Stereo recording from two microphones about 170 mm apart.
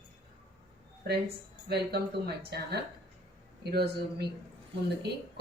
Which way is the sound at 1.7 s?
70° right (ahead or behind).